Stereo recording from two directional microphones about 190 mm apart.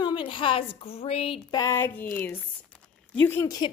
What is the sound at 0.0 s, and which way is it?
A woman's voice, 25° left (ahead or behind).